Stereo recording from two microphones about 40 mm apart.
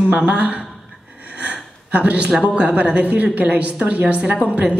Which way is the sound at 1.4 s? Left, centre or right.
Right.